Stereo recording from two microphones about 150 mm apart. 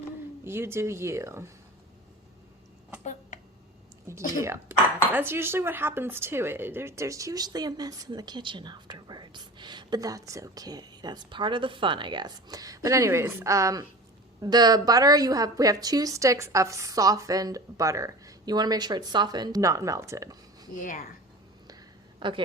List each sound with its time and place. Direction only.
0.4 s speech: 15° right (ahead or behind)
3.0 s a sound: 55° left (ahead or behind)
4.4 s a woman's voice: 20° right (ahead or behind)
22.2 s a woman's voice: 35° right (ahead or behind)